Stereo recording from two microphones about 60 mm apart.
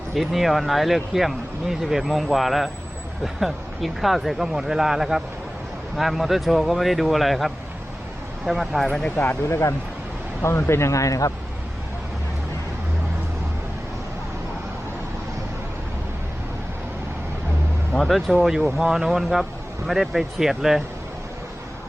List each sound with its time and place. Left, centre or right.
0.1 s speech: centre
9.1 s speech: left
9.4 s speech: left
17.9 s speech: centre